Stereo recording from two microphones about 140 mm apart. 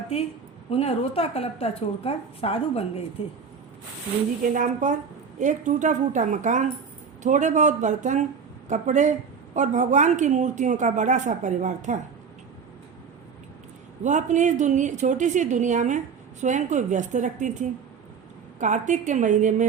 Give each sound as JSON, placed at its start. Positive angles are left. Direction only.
{"t": 0.7, "sound": "a woman's voice", "side_deg": 45}
{"t": 4.5, "sound": "speech", "side_deg": -65}
{"t": 14.0, "sound": "speech", "side_deg": -60}